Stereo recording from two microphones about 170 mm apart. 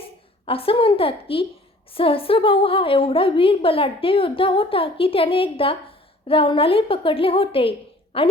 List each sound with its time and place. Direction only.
0.0 s a woman's voice: 35° left (ahead or behind)